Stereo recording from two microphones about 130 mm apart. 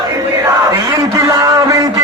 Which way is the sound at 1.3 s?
25° right (ahead or behind).